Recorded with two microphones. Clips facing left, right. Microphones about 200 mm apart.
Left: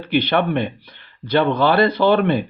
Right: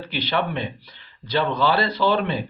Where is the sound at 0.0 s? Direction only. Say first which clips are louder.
Left 7 dB; 55° left (ahead or behind).